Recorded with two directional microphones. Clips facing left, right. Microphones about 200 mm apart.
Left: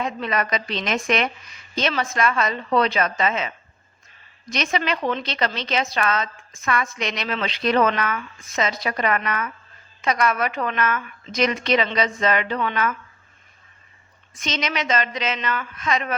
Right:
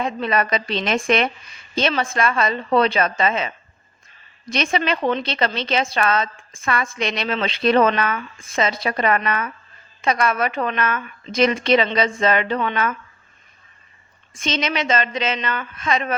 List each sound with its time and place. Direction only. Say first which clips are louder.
0.0 s a woman's voice: right 3 dB; 30° right (ahead or behind)
14.3 s a woman's voice: right 3 dB; 30° right (ahead or behind)